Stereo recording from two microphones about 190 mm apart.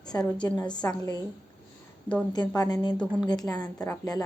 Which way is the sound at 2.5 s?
20° left (ahead or behind).